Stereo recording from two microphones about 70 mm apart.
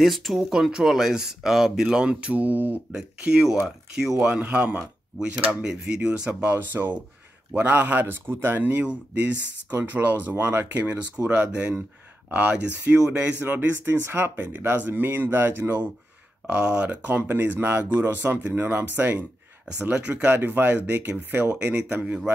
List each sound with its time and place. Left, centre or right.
0.0 s speech: centre; by 2.8 s right
2.9 s speech: centre
6.4 s speech: right
9.8 s speech: right
13.0 s speech: centre
13.4 s speech: right
16.4 s speech: centre
21.5 s speech: centre